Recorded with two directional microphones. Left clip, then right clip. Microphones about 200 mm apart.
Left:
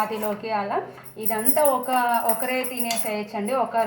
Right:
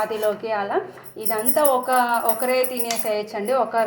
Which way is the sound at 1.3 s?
40° right (ahead or behind).